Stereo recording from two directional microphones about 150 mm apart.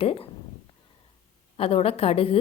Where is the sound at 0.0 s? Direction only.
40° left (ahead or behind).